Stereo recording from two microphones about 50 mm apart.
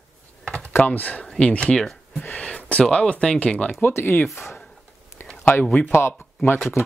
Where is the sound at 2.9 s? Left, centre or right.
Left.